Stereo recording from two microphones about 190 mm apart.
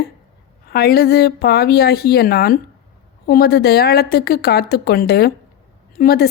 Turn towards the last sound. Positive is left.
turn(degrees=55)  # may be behind; listen again after turning